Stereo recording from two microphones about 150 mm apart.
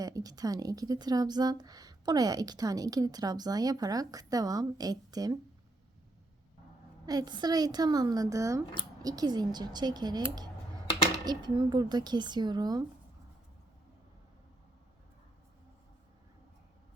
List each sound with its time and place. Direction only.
0.0 s a woman's voice: 25° right (ahead or behind)
7.0 s a woman's voice: 25° right (ahead or behind)
11.3 s a woman's voice: 30° right (ahead or behind)